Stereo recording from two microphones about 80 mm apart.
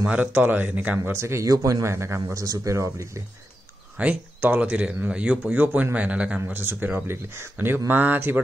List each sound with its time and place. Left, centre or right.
0.0 s speech: centre
0.9 s speech: right
4.0 s speech: right
6.6 s speech: right